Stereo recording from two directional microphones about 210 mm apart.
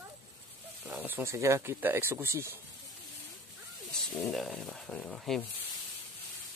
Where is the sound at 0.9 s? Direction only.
10° right (ahead or behind).